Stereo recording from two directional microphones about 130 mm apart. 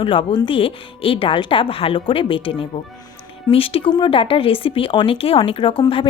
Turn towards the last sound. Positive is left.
turn(degrees=40)  # may be behind; listen again after turning